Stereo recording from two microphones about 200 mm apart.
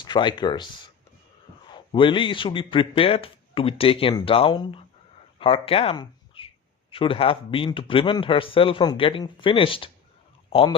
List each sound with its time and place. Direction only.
0.0 s a man's voice: 25° left (ahead or behind)